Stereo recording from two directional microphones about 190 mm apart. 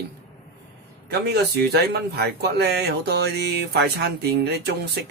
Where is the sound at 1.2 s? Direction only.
60° right (ahead or behind).